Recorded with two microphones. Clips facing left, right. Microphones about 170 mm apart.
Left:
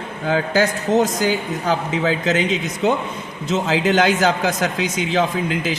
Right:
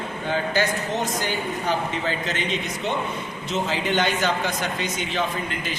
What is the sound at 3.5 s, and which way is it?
A man's voice, 90° left.